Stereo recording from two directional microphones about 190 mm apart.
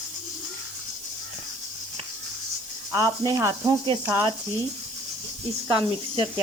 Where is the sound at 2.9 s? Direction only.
20° right (ahead or behind).